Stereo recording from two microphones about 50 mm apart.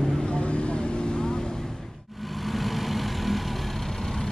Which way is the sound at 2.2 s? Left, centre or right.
Centre.